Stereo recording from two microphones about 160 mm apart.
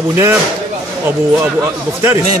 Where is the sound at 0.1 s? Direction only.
15° right (ahead or behind).